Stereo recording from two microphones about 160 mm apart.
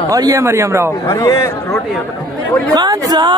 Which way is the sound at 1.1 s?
20° left (ahead or behind).